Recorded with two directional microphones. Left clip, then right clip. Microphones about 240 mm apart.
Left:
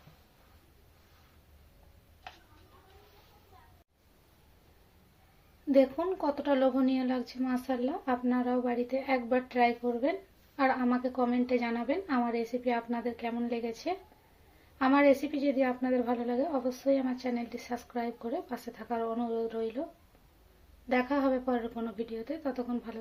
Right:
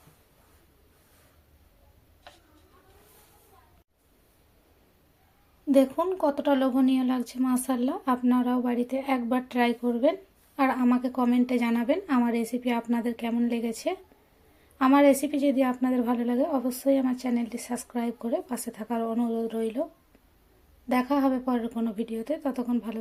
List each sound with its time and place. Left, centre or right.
5.7 s a woman's voice: right
20.9 s speech: right